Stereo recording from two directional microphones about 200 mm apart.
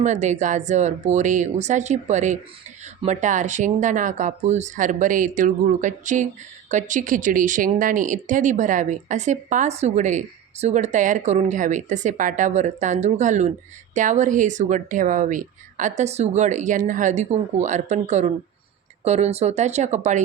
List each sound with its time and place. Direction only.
0.0 s speech: 35° right (ahead or behind)